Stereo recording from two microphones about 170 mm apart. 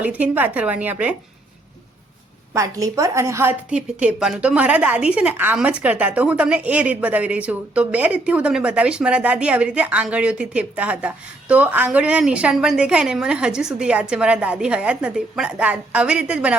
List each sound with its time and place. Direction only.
0.0 s a woman's voice: 10° right (ahead or behind)
2.5 s a woman's voice: 20° right (ahead or behind)